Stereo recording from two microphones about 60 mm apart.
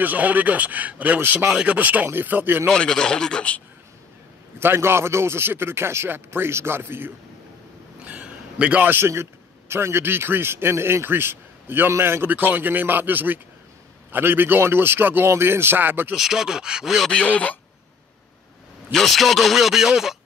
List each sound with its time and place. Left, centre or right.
0.0 s a man's voice: right
2.7 s speech: centre
4.6 s a man's voice: right
8.0 s a sound: right
8.9 s a man's voice: right
16.2 s speech: centre
17.1 s speech: left
18.9 s speech: centre